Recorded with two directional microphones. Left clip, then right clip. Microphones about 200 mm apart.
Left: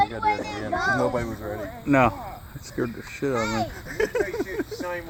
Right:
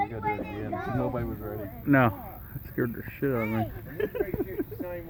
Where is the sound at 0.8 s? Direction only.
10° left (ahead or behind).